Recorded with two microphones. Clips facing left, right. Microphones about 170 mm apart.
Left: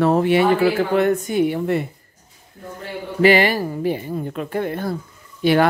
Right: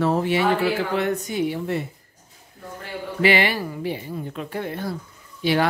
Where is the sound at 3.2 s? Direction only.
45° left (ahead or behind).